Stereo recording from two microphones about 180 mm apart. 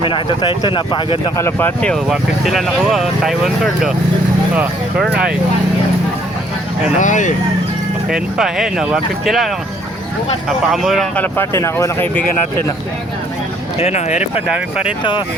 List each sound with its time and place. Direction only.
0.0 s speech: 30° left (ahead or behind)
1.4 s speech: 10° left (ahead or behind); by 5.0 s 10° right (ahead or behind)
7.0 s speech: 45° left (ahead or behind)
8.1 s speech: 5° right (ahead or behind)
10.7 s speech: centre (ahead or behind)
13.7 s speech: 35° left (ahead or behind)
14.5 s speech: 5° right (ahead or behind)